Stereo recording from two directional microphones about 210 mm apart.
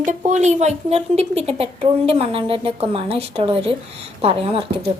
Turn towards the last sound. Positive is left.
turn(degrees=-25)  # may be behind; listen again after turning